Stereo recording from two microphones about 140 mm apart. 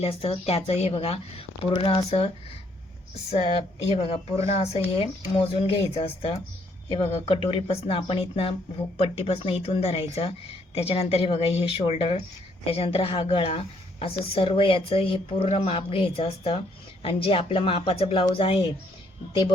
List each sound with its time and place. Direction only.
0.0 s speech: 45° left (ahead or behind)
3.3 s speech: 45° left (ahead or behind)